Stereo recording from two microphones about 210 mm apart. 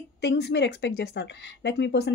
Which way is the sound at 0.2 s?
55° left (ahead or behind).